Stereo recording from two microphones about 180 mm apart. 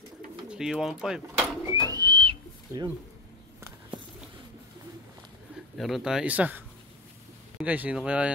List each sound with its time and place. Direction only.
0.5 s speech: 5° right (ahead or behind)
2.0 s bird: 25° right (ahead or behind)
5.8 s speech: centre (ahead or behind)